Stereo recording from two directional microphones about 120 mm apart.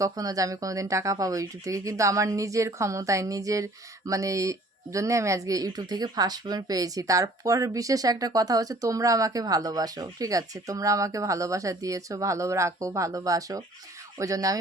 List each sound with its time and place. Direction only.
0.0 s speech: 30° right (ahead or behind)